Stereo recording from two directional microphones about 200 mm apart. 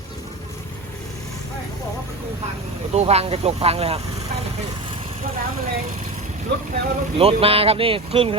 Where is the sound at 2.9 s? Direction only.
30° right (ahead or behind).